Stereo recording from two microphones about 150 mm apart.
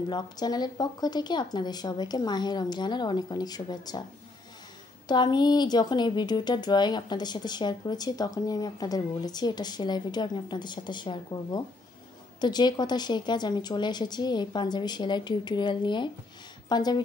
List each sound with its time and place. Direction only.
0.1 s speech: 25° left (ahead or behind)
5.0 s speech: 30° left (ahead or behind)